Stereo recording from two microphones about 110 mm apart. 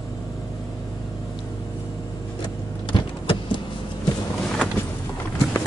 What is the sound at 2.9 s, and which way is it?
Vehicle, 45° left (ahead or behind).